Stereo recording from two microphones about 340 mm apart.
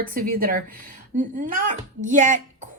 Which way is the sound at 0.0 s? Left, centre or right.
Right.